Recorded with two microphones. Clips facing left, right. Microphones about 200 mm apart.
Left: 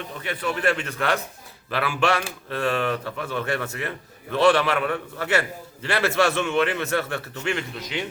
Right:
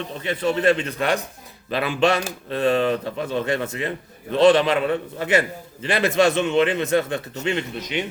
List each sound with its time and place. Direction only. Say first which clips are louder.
0.1 s a man's voice: right 6 dB; 25° right (ahead or behind)